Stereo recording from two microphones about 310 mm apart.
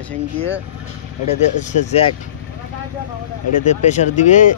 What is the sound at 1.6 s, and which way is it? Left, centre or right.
Speech, left.